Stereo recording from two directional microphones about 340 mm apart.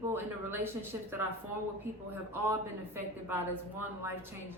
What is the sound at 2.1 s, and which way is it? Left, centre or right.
A woman's voice, centre.